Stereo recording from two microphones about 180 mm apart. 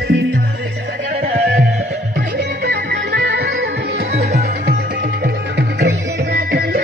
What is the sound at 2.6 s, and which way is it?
Music, 60° right (ahead or behind).